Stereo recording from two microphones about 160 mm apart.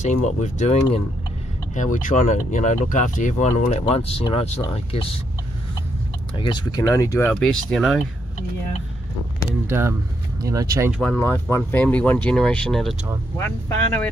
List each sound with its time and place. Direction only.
0.0 s speech: 50° left (ahead or behind)
1.8 s speech: 55° left (ahead or behind); by 4.6 s 35° left (ahead or behind)
6.3 s speech: 30° left (ahead or behind); by 8.0 s centre (ahead or behind)
9.7 s speech: 15° right (ahead or behind)
11.0 s speech: 10° left (ahead or behind)